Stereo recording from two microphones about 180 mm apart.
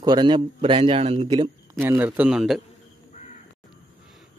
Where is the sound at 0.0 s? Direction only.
25° right (ahead or behind).